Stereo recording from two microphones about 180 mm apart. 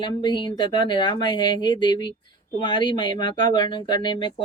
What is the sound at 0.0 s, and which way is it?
Speech, 25° left (ahead or behind).